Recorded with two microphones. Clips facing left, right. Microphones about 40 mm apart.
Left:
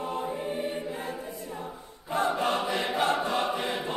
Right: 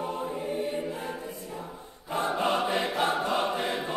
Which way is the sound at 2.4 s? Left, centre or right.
Right.